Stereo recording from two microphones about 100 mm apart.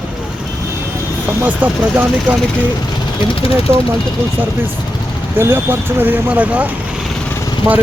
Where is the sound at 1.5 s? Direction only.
15° right (ahead or behind).